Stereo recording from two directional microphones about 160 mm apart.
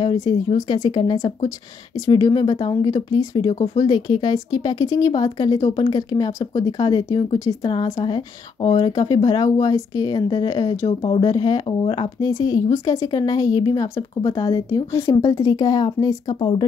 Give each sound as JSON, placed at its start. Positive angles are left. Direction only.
{"t": 0.0, "sound": "speech", "side_deg": 30}
{"t": 10.9, "sound": "speech", "side_deg": 30}